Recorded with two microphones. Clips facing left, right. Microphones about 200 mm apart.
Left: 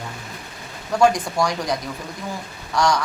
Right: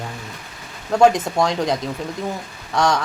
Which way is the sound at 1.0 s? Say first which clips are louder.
Right 3 dB; 20° right (ahead or behind).